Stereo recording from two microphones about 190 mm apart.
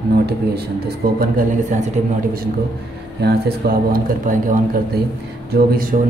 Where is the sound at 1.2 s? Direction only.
50° right (ahead or behind).